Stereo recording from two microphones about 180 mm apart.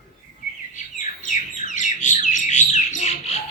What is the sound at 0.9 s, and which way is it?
Bird, 45° left (ahead or behind).